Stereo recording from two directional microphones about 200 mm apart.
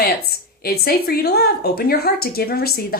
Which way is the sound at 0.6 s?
50° left (ahead or behind).